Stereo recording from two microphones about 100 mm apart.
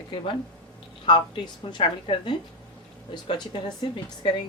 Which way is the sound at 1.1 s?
55° left (ahead or behind).